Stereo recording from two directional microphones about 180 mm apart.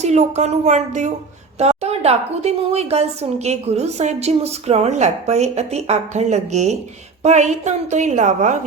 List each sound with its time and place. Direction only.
0.0 s a woman's voice: 40° right (ahead or behind)